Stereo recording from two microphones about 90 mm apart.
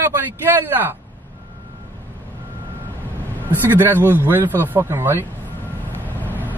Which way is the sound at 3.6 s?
25° right (ahead or behind).